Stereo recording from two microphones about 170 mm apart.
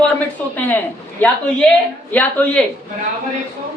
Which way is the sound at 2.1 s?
5° left (ahead or behind).